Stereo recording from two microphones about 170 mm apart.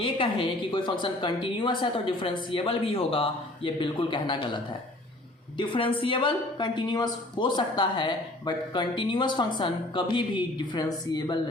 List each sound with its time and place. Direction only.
0.0 s a woman's voice: 30° left (ahead or behind)